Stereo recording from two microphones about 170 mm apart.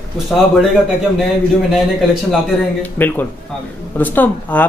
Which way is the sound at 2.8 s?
10° left (ahead or behind).